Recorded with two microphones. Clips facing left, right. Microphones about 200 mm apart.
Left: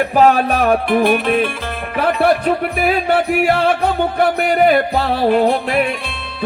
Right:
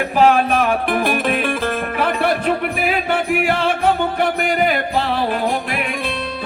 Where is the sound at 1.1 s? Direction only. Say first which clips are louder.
Left 3 dB; 45° right (ahead or behind).